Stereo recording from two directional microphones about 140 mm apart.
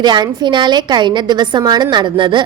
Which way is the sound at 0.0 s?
30° right (ahead or behind).